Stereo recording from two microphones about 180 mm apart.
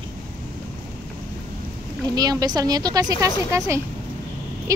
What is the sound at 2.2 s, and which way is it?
Speech, 20° right (ahead or behind).